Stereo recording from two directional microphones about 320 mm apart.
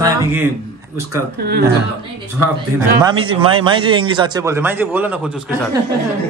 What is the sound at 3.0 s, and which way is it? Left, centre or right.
A man's voice, centre.